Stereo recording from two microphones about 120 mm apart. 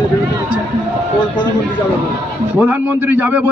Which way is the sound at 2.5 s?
15° right (ahead or behind).